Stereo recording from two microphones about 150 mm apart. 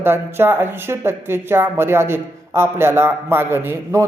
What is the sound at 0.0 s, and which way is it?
Speech, 15° right (ahead or behind).